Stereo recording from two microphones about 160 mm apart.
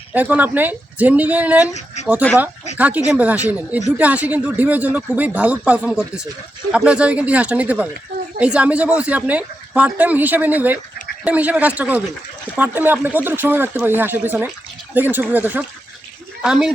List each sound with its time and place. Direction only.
0.1 s speech: 10° right (ahead or behind)
2.0 s a sound: 45° left (ahead or behind)
2.7 s speech: 10° right (ahead or behind)